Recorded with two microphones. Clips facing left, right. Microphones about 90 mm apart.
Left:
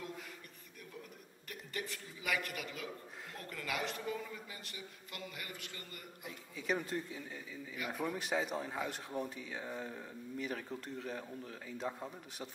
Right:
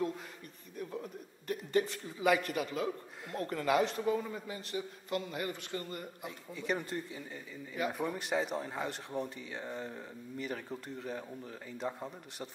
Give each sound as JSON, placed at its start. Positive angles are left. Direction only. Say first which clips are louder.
{"t": 1.5, "sound": "a man's voice", "louder": "right 12 dB", "side_deg": -30}
{"t": 6.5, "sound": "speech", "louder": "right 1 dB", "side_deg": 0}